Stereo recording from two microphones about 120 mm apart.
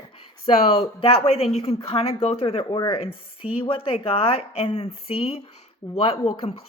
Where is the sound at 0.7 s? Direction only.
55° left (ahead or behind).